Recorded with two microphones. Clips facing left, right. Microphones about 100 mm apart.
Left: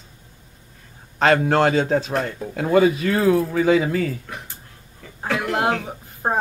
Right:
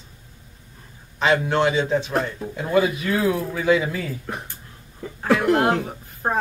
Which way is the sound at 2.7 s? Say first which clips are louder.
Left 3 dB; 45° left (ahead or behind).